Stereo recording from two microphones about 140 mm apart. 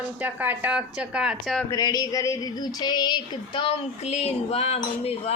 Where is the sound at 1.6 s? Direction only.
25° left (ahead or behind).